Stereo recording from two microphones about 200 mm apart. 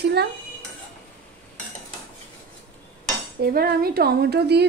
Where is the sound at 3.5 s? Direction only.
50° right (ahead or behind).